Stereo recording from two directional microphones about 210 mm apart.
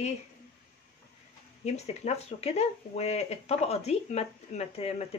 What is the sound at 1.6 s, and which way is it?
Speech, 30° left (ahead or behind).